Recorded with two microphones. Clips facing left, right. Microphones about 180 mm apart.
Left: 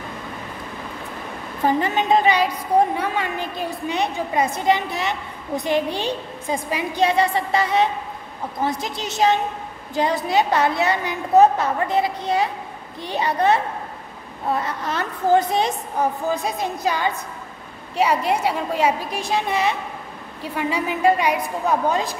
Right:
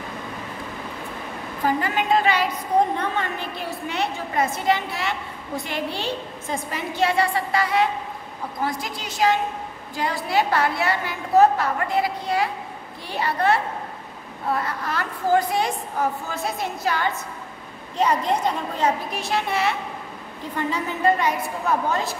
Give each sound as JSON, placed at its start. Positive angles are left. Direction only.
{"t": 1.7, "sound": "a woman's voice", "side_deg": 25}
{"t": 3.9, "sound": "a woman's voice", "side_deg": 15}